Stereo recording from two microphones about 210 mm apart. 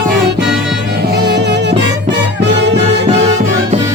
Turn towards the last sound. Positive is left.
turn(degrees=-55)  # may be behind; listen again after turning